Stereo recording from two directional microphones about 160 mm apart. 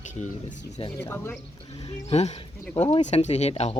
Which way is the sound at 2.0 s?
45° left (ahead or behind).